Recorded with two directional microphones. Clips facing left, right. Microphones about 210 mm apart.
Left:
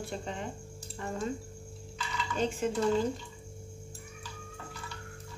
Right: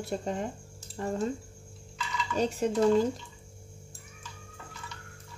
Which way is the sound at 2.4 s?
40° right (ahead or behind).